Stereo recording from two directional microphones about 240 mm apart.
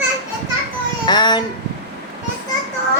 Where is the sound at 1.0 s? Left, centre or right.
Centre.